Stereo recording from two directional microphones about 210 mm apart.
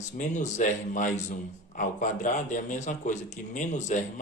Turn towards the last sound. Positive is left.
turn(degrees=35)  # may be behind; listen again after turning